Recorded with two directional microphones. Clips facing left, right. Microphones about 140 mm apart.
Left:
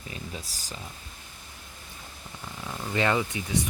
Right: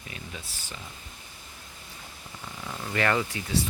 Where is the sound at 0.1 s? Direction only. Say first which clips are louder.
Left 3 dB; 40° left (ahead or behind).